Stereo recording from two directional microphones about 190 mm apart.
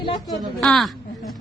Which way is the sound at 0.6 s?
Centre (ahead or behind).